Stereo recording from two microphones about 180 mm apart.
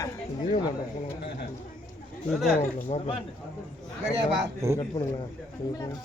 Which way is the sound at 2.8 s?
35° left (ahead or behind).